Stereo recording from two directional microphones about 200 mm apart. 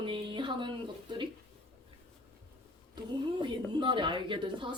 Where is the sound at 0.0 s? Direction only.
25° right (ahead or behind).